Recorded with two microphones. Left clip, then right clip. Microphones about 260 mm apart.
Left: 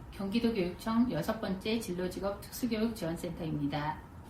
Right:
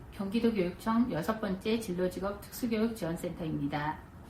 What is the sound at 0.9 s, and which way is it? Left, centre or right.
A woman's voice, centre.